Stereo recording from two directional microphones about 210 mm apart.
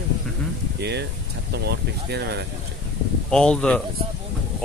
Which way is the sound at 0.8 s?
50° right (ahead or behind).